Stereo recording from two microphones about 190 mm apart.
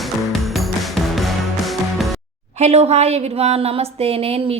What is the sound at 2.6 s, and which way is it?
Speech, 35° right (ahead or behind).